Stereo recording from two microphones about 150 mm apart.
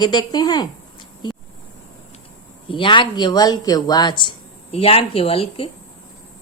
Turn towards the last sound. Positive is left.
turn(degrees=40)  # may be behind; listen again after turning